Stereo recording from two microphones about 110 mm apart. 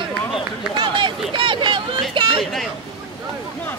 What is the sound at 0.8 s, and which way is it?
Speech, 45° right (ahead or behind).